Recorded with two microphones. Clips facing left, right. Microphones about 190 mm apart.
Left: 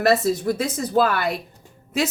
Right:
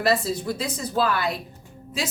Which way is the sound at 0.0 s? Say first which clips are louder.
Left 4 dB; 50° left (ahead or behind).